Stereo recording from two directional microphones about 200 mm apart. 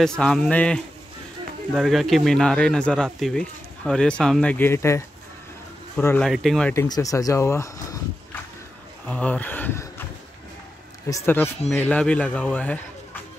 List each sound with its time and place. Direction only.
0.2 s speech: 5° left (ahead or behind)
6.7 s speech: 15° left (ahead or behind)
9.0 s speech: 5° left (ahead or behind)
11.1 s speech: 15° left (ahead or behind)